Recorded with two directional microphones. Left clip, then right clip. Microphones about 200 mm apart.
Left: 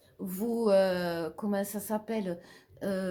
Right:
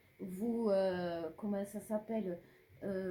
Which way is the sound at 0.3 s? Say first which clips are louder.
Left 8 dB; 30° left (ahead or behind).